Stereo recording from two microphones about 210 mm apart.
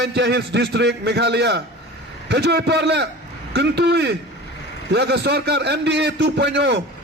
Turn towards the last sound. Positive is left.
turn(degrees=-55)  # may be behind; listen again after turning